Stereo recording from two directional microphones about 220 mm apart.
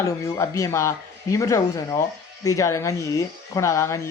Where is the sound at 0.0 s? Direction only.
15° left (ahead or behind).